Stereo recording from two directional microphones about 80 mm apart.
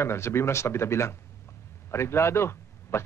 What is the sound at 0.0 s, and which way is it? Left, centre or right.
A man's voice, left.